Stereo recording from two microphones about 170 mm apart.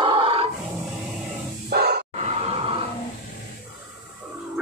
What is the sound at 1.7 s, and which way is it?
Music, 70° right (ahead or behind).